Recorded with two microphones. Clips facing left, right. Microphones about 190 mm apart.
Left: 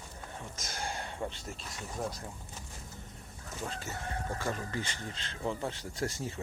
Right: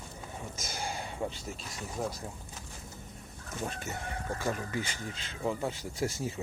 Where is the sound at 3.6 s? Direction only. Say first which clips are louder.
Even; 15° right (ahead or behind).